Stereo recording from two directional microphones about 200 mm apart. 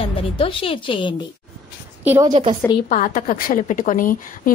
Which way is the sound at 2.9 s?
45° left (ahead or behind).